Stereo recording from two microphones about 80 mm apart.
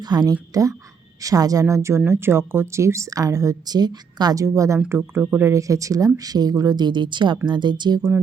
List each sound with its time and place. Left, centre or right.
0.0 s a woman's voice: right
0.5 s a woman's voice: right
4.4 s a woman's voice: right
4.9 s speech: right
5.5 s a woman's voice: right